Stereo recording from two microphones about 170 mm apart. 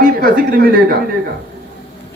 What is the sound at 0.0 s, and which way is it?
Speech, 55° right (ahead or behind).